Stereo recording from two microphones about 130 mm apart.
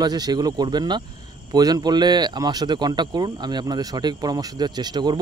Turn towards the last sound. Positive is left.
turn(degrees=-35)  # may be behind; listen again after turning